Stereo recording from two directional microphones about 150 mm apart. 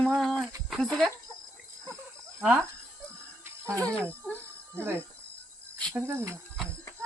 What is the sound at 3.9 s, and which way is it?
Speech, 10° left (ahead or behind).